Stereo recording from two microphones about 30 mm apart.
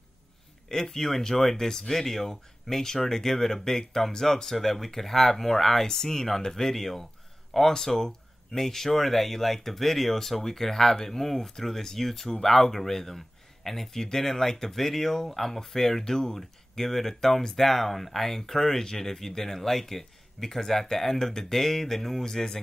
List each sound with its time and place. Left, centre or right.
0.7 s speech: centre